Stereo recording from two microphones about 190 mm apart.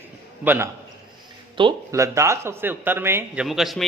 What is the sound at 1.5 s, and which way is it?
Speech, 20° right (ahead or behind).